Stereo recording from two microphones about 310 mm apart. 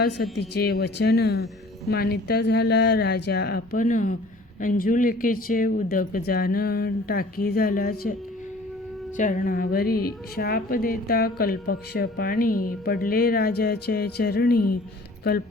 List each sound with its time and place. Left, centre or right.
0.0 s speech: left
9.1 s speech: left
14.5 s speech: left